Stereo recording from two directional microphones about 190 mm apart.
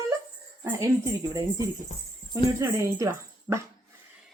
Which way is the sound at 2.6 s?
15° right (ahead or behind).